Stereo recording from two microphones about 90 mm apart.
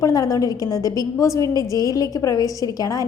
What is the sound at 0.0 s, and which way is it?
A woman's voice, 40° left (ahead or behind).